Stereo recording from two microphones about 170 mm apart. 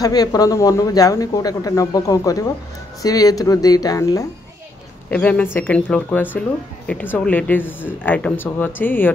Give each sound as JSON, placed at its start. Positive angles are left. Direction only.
{"t": 0.0, "sound": "speech", "side_deg": 20}
{"t": 5.1, "sound": "speech", "side_deg": 10}